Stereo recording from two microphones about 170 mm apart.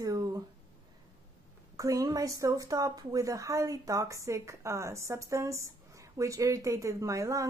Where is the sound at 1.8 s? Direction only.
20° right (ahead or behind).